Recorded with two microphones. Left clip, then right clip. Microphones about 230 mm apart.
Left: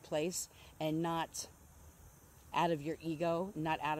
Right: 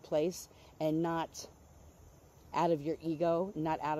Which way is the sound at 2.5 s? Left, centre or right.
Centre.